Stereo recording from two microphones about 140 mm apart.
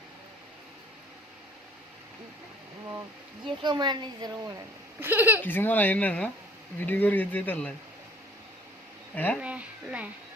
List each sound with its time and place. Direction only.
3.4 s a woman's voice: 35° right (ahead or behind)
4.9 s speech: 15° right (ahead or behind)
5.4 s speech: 15° left (ahead or behind)
9.1 s speech: 10° left (ahead or behind)
9.4 s a woman's voice: 10° right (ahead or behind)